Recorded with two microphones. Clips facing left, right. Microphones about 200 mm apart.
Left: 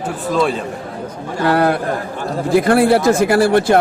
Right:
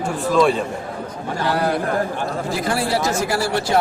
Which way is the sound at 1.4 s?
60° left (ahead or behind).